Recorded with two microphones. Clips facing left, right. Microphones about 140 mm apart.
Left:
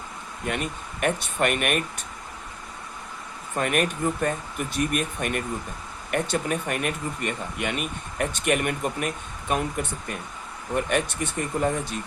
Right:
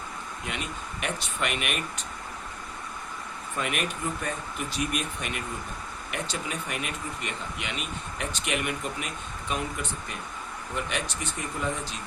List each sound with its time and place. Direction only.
0.4 s speech: 50° left (ahead or behind)
3.5 s speech: 45° left (ahead or behind)